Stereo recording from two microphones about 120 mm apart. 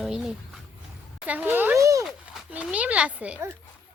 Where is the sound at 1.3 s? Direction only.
15° right (ahead or behind).